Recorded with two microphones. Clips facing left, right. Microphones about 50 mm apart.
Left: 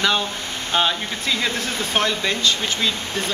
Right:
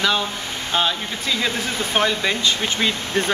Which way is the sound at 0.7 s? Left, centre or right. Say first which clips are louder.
Left 1 dB; centre.